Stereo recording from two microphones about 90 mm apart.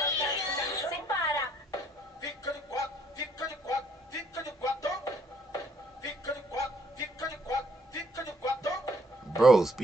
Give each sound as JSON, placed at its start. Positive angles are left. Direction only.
{"t": 0.0, "sound": "music", "side_deg": 40}
{"t": 9.4, "sound": "speech", "side_deg": -5}